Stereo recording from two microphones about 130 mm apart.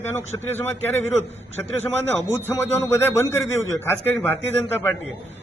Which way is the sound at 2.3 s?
20° left (ahead or behind).